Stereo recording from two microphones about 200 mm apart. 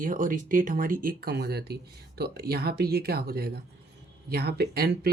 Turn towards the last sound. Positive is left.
turn(degrees=-50)  # may be behind; listen again after turning